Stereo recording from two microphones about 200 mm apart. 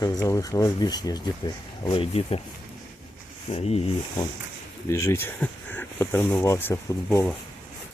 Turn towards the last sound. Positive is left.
turn(degrees=10)  # may be behind; listen again after turning